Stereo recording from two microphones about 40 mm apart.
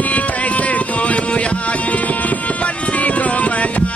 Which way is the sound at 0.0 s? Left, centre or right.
Left.